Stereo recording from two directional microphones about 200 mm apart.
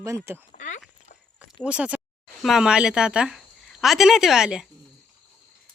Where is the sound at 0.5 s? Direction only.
40° left (ahead or behind).